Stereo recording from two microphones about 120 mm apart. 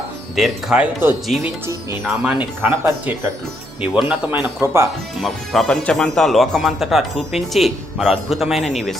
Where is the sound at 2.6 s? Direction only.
15° right (ahead or behind).